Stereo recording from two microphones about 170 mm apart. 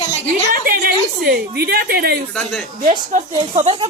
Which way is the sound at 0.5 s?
60° right (ahead or behind).